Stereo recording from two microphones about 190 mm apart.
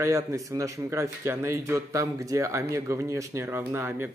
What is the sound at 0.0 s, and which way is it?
Speech, 15° right (ahead or behind).